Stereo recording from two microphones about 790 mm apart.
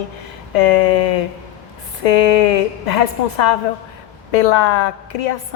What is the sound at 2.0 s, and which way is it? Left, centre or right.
A woman's voice, left.